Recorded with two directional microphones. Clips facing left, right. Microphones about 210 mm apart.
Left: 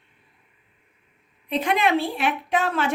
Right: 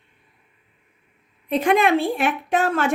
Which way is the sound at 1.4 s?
50° right (ahead or behind).